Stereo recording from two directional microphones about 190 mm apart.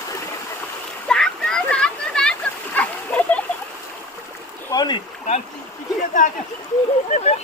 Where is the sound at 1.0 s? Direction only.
5° left (ahead or behind).